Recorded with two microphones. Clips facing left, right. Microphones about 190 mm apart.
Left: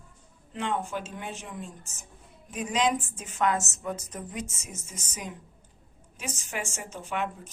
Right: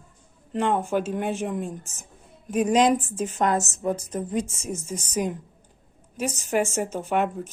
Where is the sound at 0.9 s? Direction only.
55° right (ahead or behind).